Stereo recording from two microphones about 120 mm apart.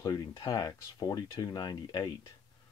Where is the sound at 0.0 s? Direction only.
35° left (ahead or behind).